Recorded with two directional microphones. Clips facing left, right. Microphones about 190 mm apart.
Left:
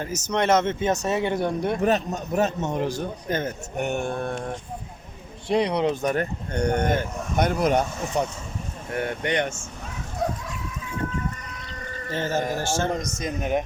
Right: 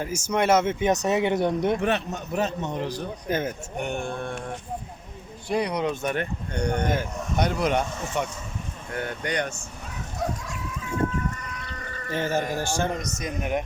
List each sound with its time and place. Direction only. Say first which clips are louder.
0.0 s speech: even; 10° right (ahead or behind)
1.8 s a man's voice: left 3 dB; 40° left (ahead or behind)
3.2 s speech: right 1 dB; 10° right (ahead or behind)
3.8 s a man's voice: left 4 dB; 45° left (ahead or behind)
5.5 s a man's voice: left 3 dB; 25° left (ahead or behind); by 8.2 s 40° left (ahead or behind)
8.9 s speech: left 4 dB; 25° left (ahead or behind)
12.1 s speech: even; 15° right (ahead or behind)
13.2 s speech: left 2 dB; 25° left (ahead or behind)